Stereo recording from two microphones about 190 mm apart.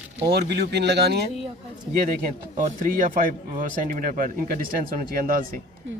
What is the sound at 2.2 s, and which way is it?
A man's voice, 45° right (ahead or behind).